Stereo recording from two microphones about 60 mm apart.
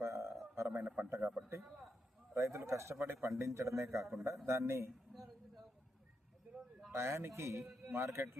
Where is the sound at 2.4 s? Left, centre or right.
Right.